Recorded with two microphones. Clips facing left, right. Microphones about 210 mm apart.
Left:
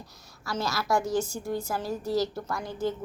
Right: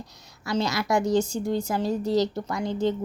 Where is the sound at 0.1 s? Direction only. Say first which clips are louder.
Right 7 dB; 20° right (ahead or behind).